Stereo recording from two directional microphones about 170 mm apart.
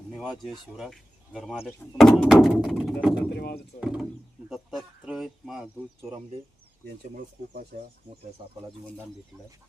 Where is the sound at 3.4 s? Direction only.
70° left (ahead or behind).